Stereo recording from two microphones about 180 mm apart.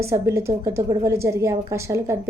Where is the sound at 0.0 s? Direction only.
15° right (ahead or behind).